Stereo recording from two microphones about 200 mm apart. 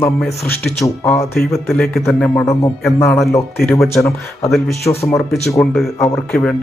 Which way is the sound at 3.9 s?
15° left (ahead or behind).